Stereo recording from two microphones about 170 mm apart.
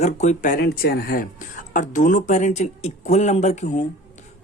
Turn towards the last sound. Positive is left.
turn(degrees=45)  # may be behind; listen again after turning